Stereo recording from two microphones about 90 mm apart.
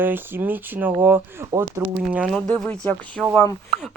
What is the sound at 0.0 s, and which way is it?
Speech, 25° right (ahead or behind).